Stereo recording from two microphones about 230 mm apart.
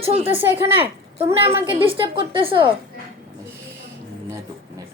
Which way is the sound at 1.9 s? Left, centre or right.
Right.